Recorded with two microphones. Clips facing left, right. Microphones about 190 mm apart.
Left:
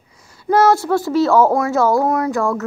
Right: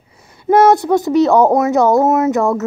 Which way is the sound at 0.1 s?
25° right (ahead or behind).